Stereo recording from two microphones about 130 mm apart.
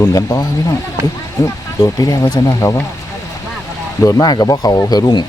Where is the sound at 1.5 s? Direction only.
25° left (ahead or behind).